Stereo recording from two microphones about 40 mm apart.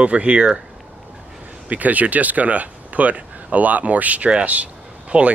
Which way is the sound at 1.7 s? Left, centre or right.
Right.